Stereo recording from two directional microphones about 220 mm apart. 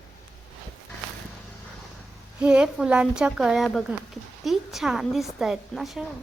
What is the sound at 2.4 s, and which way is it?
Speech, 5° right (ahead or behind).